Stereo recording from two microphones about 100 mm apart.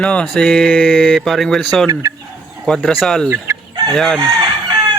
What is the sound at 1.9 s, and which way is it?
Fowl, 35° right (ahead or behind).